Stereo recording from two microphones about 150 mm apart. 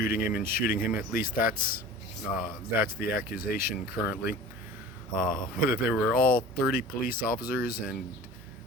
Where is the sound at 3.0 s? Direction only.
75° left (ahead or behind).